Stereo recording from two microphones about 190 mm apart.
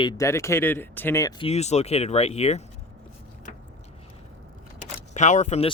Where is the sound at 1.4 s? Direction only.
35° left (ahead or behind).